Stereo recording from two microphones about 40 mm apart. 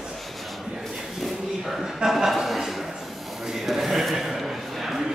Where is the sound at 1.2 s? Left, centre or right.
Centre.